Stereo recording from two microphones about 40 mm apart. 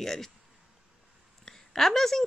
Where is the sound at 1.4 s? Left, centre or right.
Centre.